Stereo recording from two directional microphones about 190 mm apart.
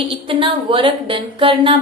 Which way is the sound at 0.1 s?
30° right (ahead or behind).